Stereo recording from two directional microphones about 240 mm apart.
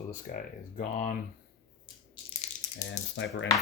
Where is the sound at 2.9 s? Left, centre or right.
Left.